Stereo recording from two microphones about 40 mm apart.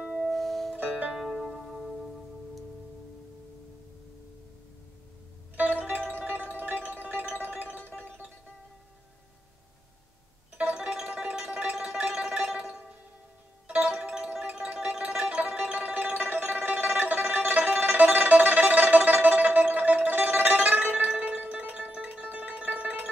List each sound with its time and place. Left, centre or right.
0.0 s music: right
0.3 s music: centre
0.7 s music: right
1.1 s music: centre
1.8 s music: centre
5.6 s music: right
10.6 s music: right
11.1 s music: right
11.3 s music: right
13.7 s music: right